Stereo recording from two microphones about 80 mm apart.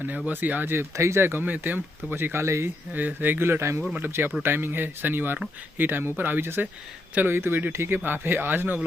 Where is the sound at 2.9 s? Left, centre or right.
Right.